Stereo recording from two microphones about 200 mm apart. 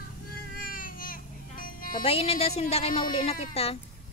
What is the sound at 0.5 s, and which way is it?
Music, 45° left (ahead or behind).